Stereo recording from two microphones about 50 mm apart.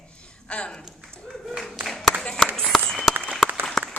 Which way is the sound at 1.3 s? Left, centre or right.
Centre.